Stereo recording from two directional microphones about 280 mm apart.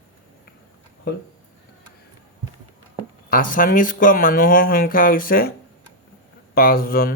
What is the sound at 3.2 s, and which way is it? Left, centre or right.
Speech, left.